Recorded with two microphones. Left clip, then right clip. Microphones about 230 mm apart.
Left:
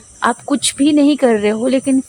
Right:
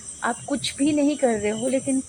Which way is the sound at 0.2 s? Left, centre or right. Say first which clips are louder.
Left 10 dB; left.